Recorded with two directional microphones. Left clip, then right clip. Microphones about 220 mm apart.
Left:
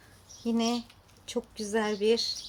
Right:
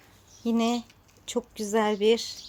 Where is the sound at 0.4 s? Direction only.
35° right (ahead or behind).